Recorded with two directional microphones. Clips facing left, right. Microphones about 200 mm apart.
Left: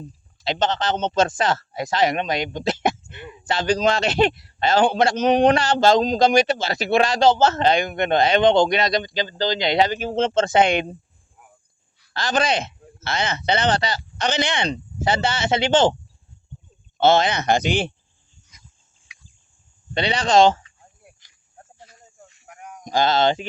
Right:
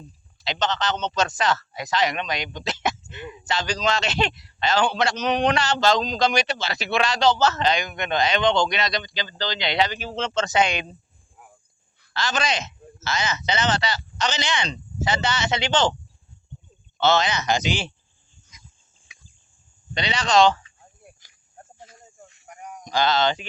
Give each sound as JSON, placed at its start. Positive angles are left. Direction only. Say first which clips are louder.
{"t": 0.4, "sound": "a man's voice", "louder": "left 3 dB", "side_deg": 50}
{"t": 12.2, "sound": "a man's voice", "louder": "left 4 dB", "side_deg": 55}
{"t": 17.0, "sound": "speech", "louder": "left 4 dB", "side_deg": 50}
{"t": 19.9, "sound": "a man's voice", "louder": "left 3 dB", "side_deg": 55}
{"t": 22.4, "sound": "a sound", "louder": "right 1 dB", "side_deg": 0}
{"t": 22.8, "sound": "a man's voice", "louder": "left 3 dB", "side_deg": 50}